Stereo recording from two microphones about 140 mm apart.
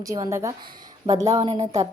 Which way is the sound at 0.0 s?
20° right (ahead or behind).